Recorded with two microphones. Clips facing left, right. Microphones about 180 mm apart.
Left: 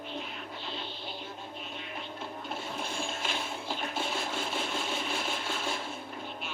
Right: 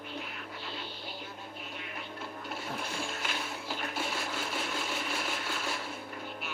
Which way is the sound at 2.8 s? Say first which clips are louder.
Left 2 dB; 25° left (ahead or behind).